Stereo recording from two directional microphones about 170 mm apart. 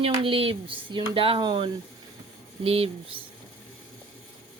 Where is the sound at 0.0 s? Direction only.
30° right (ahead or behind).